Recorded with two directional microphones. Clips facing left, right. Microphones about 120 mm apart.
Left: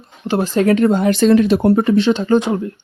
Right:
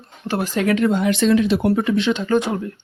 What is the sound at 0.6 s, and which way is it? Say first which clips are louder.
Speech: left 4 dB; 40° left (ahead or behind).